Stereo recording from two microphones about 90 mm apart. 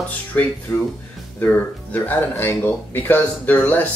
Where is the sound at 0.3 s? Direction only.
20° left (ahead or behind).